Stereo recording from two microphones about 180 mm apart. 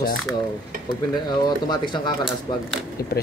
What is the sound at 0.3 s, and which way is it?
Dishes, centre (ahead or behind).